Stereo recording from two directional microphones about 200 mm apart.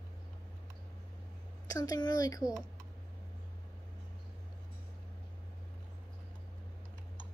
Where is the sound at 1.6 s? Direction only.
20° left (ahead or behind).